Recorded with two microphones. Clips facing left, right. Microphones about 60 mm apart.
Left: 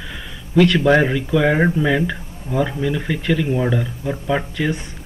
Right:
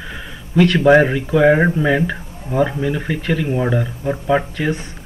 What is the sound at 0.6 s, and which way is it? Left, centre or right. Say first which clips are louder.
Speech: right 3 dB; right.